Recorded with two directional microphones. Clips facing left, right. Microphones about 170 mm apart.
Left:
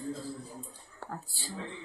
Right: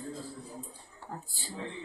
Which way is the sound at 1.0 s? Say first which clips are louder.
Left 2 dB; 85° left.